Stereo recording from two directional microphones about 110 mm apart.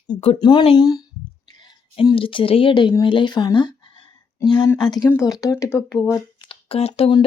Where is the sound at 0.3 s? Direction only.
40° left (ahead or behind).